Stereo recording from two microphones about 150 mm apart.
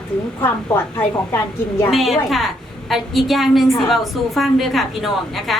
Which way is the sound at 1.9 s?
Centre (ahead or behind).